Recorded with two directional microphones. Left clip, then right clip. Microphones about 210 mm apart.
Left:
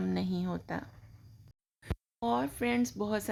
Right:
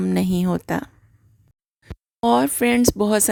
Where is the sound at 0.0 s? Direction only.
45° right (ahead or behind).